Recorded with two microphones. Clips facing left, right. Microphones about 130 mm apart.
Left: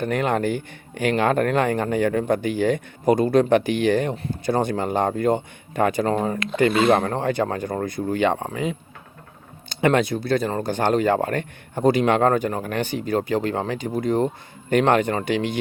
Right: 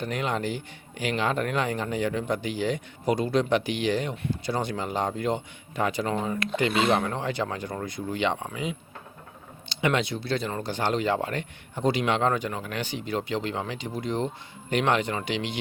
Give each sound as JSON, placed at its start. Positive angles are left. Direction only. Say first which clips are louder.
{"t": 0.0, "sound": "speech", "louder": "left 7 dB", "side_deg": 55}